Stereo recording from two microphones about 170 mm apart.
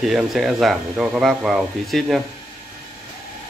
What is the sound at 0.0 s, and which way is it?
A man's voice, centre (ahead or behind).